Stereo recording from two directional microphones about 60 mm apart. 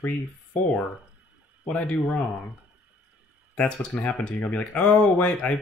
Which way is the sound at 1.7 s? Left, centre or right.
Left.